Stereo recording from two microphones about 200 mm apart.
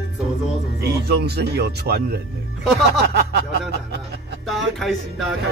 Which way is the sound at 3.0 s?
55° right (ahead or behind).